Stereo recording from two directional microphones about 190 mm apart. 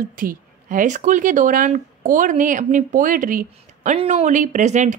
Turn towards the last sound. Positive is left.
turn(degrees=-40)  # may be behind; listen again after turning